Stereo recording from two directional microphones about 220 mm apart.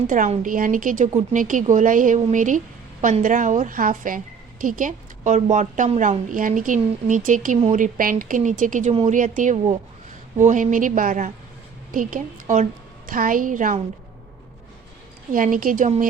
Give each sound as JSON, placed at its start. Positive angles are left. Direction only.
{"t": 0.1, "sound": "a woman's voice", "side_deg": -35}
{"t": 15.3, "sound": "a woman's voice", "side_deg": -40}